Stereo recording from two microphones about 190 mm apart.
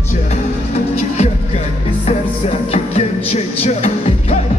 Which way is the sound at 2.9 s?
35° left (ahead or behind).